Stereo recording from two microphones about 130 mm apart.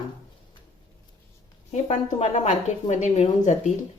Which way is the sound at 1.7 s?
60° left (ahead or behind).